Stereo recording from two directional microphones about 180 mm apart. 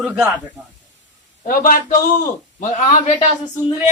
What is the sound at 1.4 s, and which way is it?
A man's voice, 50° left (ahead or behind).